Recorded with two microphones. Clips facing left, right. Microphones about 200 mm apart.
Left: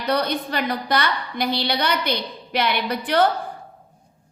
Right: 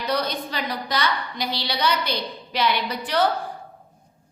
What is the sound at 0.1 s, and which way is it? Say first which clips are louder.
A woman's voice: left 4 dB; 55° left (ahead or behind).